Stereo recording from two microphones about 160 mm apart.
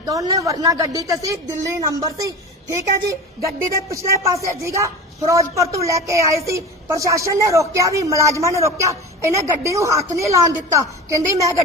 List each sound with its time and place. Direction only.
0.0 s a woman's voice: 20° right (ahead or behind)